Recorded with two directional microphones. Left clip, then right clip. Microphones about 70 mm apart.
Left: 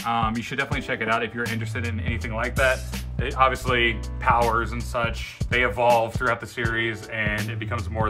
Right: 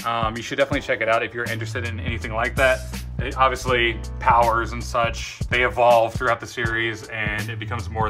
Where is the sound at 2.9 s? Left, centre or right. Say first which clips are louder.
Even; centre.